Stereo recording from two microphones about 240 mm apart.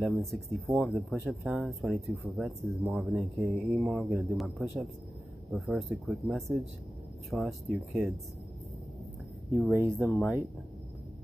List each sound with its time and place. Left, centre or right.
0.0 s speech: centre
9.6 s speech: centre